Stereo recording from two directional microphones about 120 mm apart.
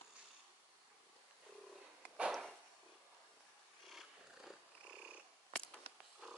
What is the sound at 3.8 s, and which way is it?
Purr, centre (ahead or behind).